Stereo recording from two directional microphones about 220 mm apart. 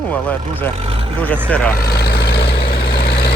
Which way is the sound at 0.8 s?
25° right (ahead or behind).